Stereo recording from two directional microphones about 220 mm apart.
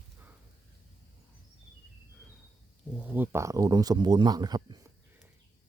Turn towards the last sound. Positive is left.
turn(degrees=-20)  # may be behind; listen again after turning